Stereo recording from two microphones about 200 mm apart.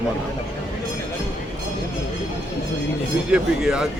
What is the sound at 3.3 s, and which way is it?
Speech, 5° right (ahead or behind).